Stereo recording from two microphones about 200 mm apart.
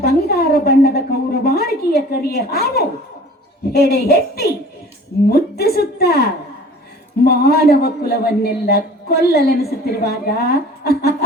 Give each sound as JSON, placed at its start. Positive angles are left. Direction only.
{"t": 0.0, "sound": "a woman's voice", "side_deg": 50}